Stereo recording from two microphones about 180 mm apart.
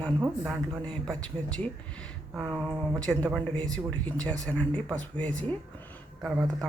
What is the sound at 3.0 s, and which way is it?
Speech, 5° left (ahead or behind).